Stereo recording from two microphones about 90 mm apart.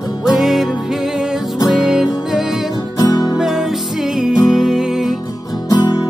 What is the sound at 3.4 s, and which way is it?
Music, 5° right (ahead or behind).